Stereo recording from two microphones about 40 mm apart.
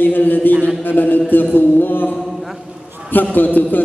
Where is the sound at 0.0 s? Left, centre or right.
Left.